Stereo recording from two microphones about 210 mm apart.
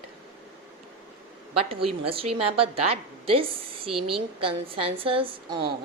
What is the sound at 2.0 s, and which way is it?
A woman's voice, 25° right (ahead or behind).